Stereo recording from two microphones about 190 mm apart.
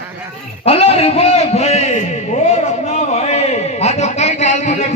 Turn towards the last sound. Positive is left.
turn(degrees=40)  # may be behind; listen again after turning